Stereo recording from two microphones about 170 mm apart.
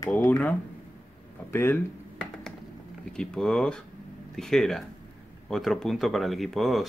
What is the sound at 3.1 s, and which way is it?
A man's voice, 5° left (ahead or behind).